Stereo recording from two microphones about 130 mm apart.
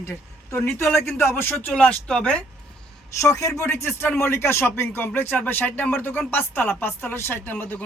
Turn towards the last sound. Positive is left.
turn(degrees=10)  # may be behind; listen again after turning